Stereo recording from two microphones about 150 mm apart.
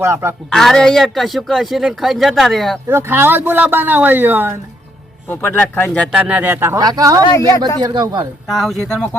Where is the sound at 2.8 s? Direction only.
15° right (ahead or behind).